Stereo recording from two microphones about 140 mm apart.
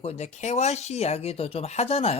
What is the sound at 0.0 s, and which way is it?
Speech, 50° left (ahead or behind).